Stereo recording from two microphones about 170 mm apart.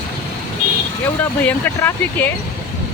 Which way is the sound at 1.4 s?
10° left (ahead or behind).